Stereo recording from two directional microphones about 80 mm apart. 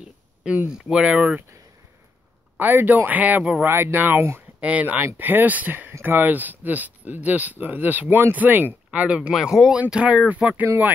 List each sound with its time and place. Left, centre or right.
0.0 s speech: centre
2.5 s speech: right